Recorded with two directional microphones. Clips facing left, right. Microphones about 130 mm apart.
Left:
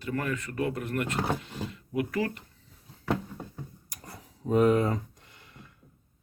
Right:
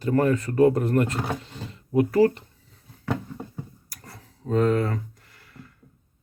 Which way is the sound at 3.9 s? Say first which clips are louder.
Even; 15° left (ahead or behind).